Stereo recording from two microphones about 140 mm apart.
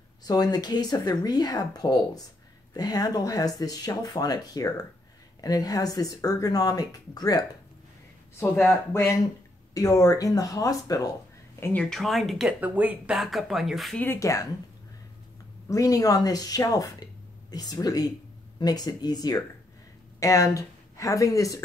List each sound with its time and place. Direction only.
0.2 s speech: 25° left (ahead or behind)
8.9 s speech: 20° left (ahead or behind)
11.6 s speech: 10° left (ahead or behind)
13.9 s speech: 15° left (ahead or behind)
15.7 s speech: 25° left (ahead or behind)